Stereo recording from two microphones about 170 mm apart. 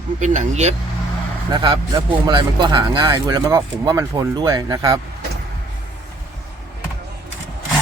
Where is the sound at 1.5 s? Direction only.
25° right (ahead or behind).